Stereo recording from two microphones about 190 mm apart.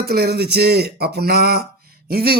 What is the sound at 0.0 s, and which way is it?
A man's voice, 55° right (ahead or behind).